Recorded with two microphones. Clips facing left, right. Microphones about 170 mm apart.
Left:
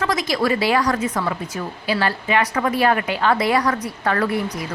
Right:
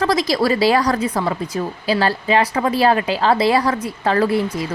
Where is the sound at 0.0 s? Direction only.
35° right (ahead or behind).